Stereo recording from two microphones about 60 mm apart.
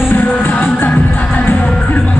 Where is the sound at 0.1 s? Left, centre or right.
Left.